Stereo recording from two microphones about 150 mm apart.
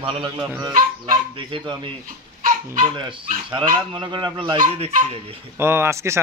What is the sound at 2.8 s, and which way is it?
Speech, 35° right (ahead or behind).